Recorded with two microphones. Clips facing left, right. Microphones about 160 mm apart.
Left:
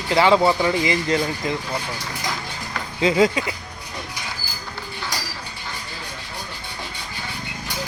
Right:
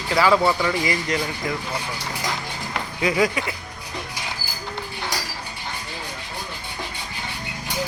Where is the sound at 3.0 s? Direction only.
25° left (ahead or behind).